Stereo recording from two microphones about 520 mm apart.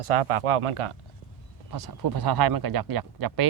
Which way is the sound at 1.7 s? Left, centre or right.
Right.